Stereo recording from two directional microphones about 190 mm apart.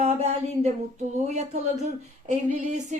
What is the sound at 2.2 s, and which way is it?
Speech, 40° right (ahead or behind).